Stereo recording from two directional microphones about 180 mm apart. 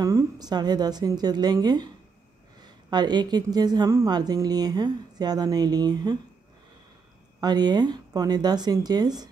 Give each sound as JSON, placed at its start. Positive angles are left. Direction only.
{"t": 0.0, "sound": "a woman's voice", "side_deg": -20}
{"t": 7.3, "sound": "a woman's voice", "side_deg": -20}